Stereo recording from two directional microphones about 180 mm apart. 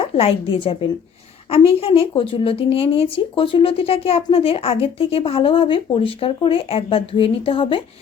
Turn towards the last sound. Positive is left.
turn(degrees=30)  # may be behind; listen again after turning